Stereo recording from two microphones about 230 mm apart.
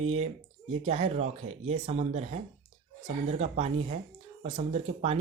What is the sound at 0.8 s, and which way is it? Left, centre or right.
Speech, right.